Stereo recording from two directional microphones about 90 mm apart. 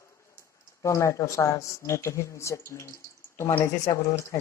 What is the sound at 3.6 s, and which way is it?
Speech, 45° left (ahead or behind).